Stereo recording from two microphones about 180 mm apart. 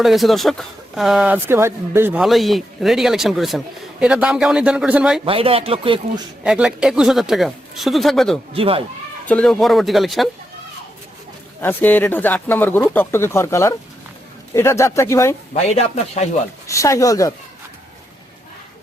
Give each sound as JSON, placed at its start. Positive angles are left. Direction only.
{"t": 0.0, "sound": "speech", "side_deg": 0}
{"t": 2.2, "sound": "speech", "side_deg": 0}
{"t": 5.2, "sound": "speech", "side_deg": -30}
{"t": 6.4, "sound": "speech", "side_deg": -5}
{"t": 8.5, "sound": "speech", "side_deg": -30}
{"t": 9.2, "sound": "speech", "side_deg": 5}
{"t": 11.6, "sound": "speech", "side_deg": 10}
{"t": 15.5, "sound": "speech", "side_deg": 35}
{"t": 16.6, "sound": "speech", "side_deg": 15}